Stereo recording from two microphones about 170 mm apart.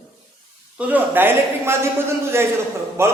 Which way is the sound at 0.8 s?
10° right (ahead or behind).